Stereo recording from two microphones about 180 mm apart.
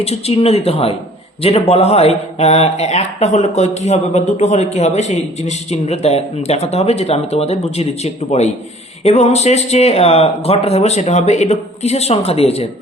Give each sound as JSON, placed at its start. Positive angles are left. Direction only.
{"t": 0.0, "sound": "speech", "side_deg": 35}